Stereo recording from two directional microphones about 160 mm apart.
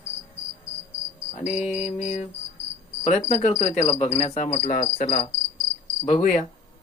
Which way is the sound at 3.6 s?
40° left (ahead or behind).